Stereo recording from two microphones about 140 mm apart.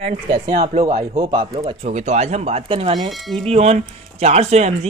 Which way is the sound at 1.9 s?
55° right (ahead or behind).